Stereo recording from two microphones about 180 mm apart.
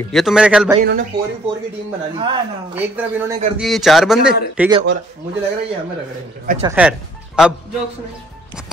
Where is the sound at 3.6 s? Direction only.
Centre (ahead or behind).